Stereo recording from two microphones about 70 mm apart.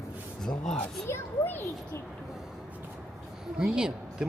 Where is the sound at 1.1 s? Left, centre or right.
Left.